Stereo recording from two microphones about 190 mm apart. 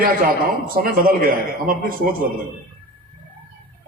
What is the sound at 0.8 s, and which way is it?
A man's voice, 50° right (ahead or behind).